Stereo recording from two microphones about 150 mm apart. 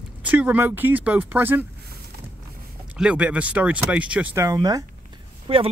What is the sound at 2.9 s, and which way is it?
Speech, 10° right (ahead or behind).